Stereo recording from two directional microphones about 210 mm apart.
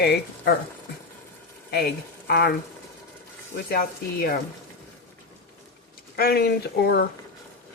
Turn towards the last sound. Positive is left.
turn(degrees=50)  # may be behind; listen again after turning